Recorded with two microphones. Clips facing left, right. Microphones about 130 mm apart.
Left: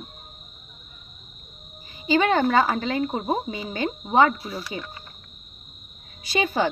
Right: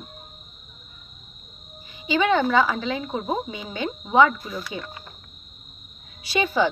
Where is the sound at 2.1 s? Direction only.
45° left (ahead or behind).